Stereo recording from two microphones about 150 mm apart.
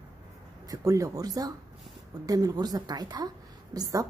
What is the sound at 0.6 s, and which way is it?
A woman's voice, 20° right (ahead or behind).